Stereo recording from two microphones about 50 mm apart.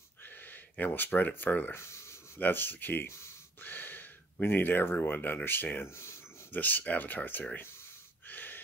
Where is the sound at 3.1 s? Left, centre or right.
Left.